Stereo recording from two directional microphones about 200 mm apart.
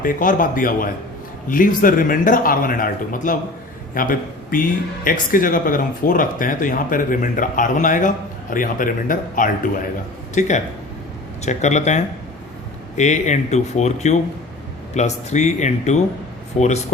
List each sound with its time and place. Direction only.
0.0 s a man's voice: 40° left (ahead or behind)